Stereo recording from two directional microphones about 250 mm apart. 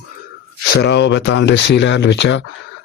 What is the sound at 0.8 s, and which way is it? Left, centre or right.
A man's voice, left.